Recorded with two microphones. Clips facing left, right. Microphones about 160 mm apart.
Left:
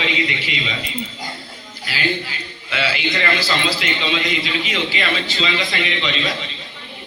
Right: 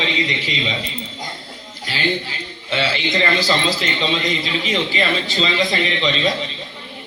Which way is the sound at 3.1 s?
30° right (ahead or behind).